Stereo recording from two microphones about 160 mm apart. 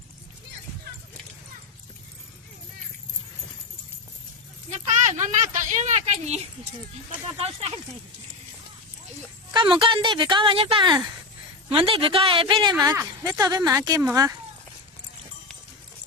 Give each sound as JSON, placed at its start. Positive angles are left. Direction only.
{"t": 4.7, "sound": "speech", "side_deg": -45}
{"t": 9.5, "sound": "speech", "side_deg": -30}
{"t": 12.7, "sound": "a woman's voice", "side_deg": -20}